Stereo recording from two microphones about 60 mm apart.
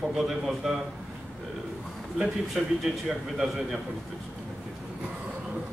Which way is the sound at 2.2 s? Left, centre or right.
Centre.